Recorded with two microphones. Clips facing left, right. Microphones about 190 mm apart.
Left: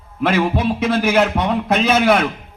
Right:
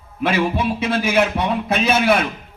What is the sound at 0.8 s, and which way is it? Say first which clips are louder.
A man's voice: left 3 dB; 55° left (ahead or behind).